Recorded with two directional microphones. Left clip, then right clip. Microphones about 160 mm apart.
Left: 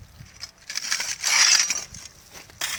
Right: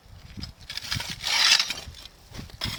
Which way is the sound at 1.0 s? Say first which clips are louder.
Left 3 dB; 5° left (ahead or behind).